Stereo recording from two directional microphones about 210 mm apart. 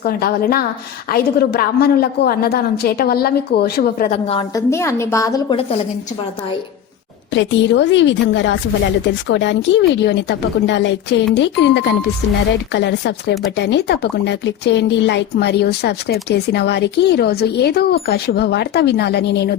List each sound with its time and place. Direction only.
0.0 s speech: 45° left (ahead or behind)
4.3 s a woman's voice: 20° left (ahead or behind)
7.3 s a woman's voice: 60° left (ahead or behind)